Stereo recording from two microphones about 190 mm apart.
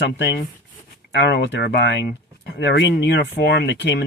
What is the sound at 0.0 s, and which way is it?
Speech, 60° left (ahead or behind).